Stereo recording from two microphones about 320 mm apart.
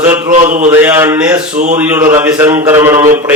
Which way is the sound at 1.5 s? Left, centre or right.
Right.